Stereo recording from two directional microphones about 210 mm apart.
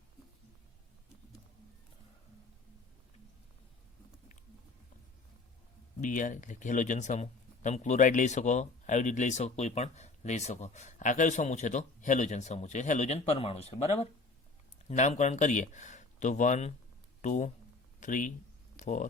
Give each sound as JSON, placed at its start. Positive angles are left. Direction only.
{"t": 6.0, "sound": "speech", "side_deg": 35}